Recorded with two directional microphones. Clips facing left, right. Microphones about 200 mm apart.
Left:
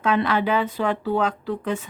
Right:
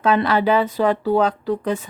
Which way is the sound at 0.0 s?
35° right (ahead or behind).